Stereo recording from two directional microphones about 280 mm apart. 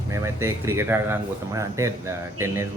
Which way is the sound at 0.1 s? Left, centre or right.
Centre.